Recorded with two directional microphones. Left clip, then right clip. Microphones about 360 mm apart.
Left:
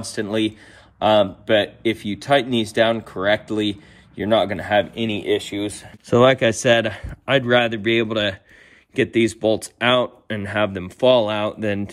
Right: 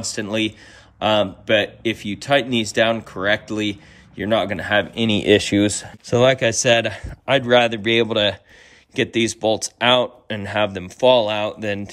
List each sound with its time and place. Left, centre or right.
0.0 s speech: centre
5.3 s speech: right
6.0 s speech: centre